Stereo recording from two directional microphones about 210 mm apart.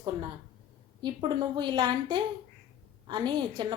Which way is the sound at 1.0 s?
20° right (ahead or behind).